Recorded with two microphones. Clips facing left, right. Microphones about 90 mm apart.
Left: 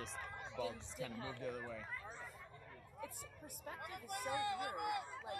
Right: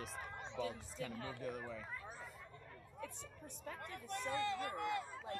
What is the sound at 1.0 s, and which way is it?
Speech, 20° left (ahead or behind).